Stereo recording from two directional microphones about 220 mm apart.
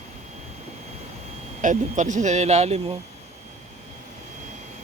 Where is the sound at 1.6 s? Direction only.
35° right (ahead or behind).